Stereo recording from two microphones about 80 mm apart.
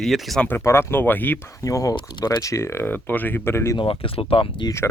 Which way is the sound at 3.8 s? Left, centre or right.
Left.